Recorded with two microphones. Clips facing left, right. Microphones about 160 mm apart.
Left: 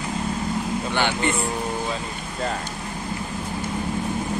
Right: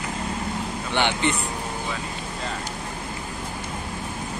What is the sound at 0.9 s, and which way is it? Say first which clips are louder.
Vehicle: right 1 dB; 20° right (ahead or behind).